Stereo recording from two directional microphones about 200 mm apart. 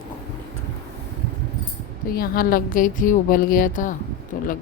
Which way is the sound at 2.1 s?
45° left (ahead or behind).